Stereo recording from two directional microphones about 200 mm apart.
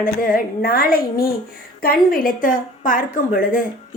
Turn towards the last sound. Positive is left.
turn(degrees=45)  # may be behind; listen again after turning